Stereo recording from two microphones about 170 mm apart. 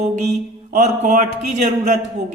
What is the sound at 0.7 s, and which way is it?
Speech, 45° right (ahead or behind).